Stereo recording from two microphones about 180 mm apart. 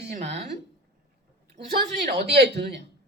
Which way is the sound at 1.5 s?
55° right (ahead or behind).